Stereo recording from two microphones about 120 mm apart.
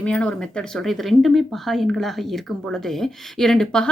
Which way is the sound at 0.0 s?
10° left (ahead or behind).